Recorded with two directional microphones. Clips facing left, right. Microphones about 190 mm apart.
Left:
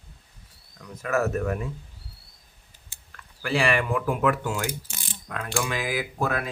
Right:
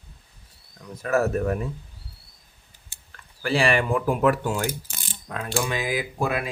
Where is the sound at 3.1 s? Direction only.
30° right (ahead or behind).